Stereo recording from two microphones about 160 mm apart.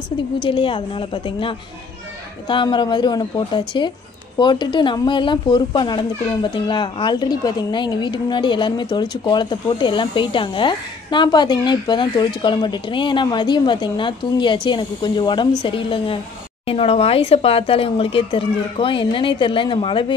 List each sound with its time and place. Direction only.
0.4 s speech: 30° left (ahead or behind)